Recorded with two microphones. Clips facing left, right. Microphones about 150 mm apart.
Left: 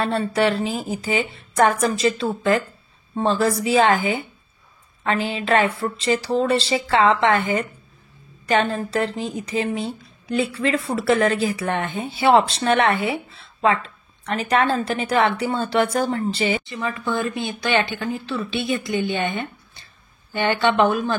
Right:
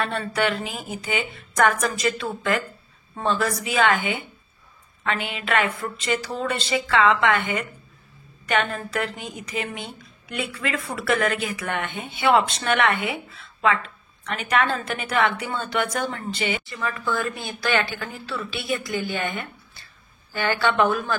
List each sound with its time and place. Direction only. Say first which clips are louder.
0.0 s a woman's voice: left 4 dB; 30° left (ahead or behind)
16.6 s a woman's voice: left 2 dB; 20° left (ahead or behind)